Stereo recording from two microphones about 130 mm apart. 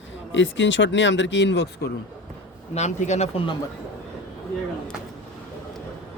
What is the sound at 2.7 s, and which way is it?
Speech, 60° left (ahead or behind).